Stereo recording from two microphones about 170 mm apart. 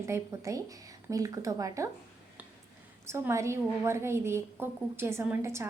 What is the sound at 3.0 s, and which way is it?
A woman's voice, 15° right (ahead or behind).